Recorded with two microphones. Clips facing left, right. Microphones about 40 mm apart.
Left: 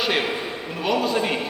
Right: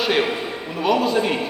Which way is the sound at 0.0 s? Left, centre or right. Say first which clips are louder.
Right 3 dB; centre.